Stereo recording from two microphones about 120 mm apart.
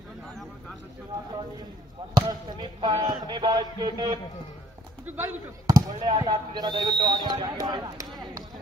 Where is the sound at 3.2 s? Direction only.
40° right (ahead or behind).